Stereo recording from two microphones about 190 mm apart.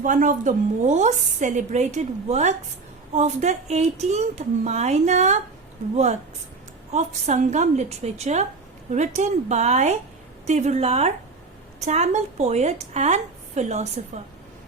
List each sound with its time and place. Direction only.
0.0 s a woman's voice: 45° right (ahead or behind)
6.9 s a woman's voice: 35° right (ahead or behind)